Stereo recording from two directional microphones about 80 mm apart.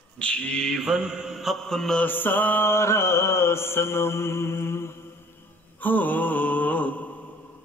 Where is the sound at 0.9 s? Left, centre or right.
Centre.